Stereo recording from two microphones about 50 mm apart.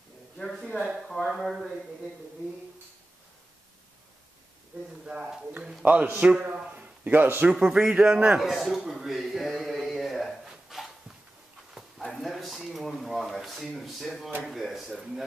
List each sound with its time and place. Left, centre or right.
0.8 s speech: centre
5.0 s a man's voice: right
5.6 s a man's voice: centre
5.9 s a man's voice: right
6.6 s a sound: right
7.1 s a man's voice: right
7.5 s a man's voice: centre
8.4 s speech: centre
10.7 s a sound: centre
13.4 s speech: centre